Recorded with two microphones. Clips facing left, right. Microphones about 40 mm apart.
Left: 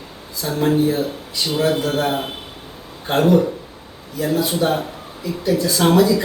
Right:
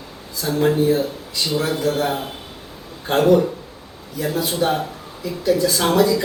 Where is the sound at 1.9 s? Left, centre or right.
Left.